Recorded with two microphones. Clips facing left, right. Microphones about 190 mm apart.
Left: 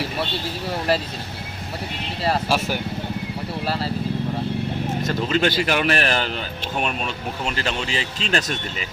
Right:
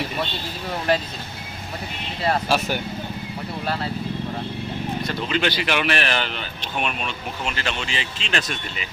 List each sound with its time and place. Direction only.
2.2 s speech: 5° left (ahead or behind)
5.0 s speech: 45° left (ahead or behind)
7.4 s speech: 40° left (ahead or behind)